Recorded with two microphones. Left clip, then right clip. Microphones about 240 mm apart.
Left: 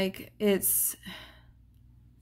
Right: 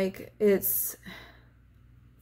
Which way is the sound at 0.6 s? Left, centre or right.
Left.